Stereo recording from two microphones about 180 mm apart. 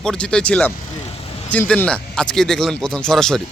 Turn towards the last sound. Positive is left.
turn(degrees=5)  # may be behind; listen again after turning